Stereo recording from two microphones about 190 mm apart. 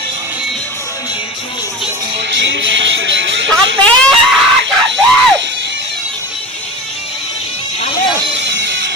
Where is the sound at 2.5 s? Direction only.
75° right (ahead or behind).